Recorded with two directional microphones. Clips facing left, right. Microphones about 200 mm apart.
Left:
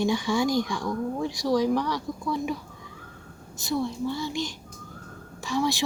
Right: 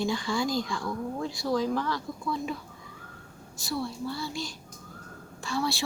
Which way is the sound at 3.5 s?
20° left (ahead or behind).